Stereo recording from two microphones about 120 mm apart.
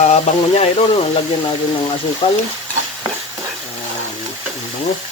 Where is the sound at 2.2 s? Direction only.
45° left (ahead or behind).